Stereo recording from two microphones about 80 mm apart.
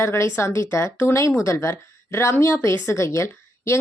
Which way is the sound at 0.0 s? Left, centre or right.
Left.